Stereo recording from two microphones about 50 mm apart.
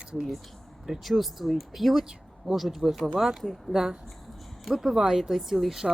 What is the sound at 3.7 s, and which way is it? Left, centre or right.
Speech, centre.